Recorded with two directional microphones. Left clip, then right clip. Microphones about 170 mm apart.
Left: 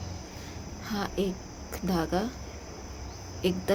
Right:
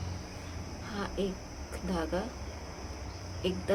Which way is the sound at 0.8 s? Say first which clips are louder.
Left 4 dB; 60° left (ahead or behind).